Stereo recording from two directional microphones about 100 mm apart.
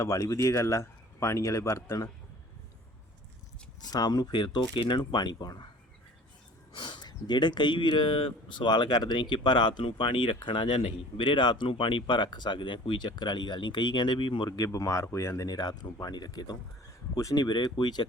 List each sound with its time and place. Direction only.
0.0 s speech: 35° left (ahead or behind)
3.8 s speech: 40° left (ahead or behind)
6.7 s a sound: 55° left (ahead or behind)
7.1 s speech: 45° left (ahead or behind)
14.5 s speech: 35° left (ahead or behind)
15.4 s speech: 40° left (ahead or behind)